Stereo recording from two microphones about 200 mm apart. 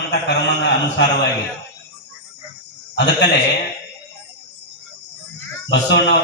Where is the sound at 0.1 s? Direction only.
60° left (ahead or behind).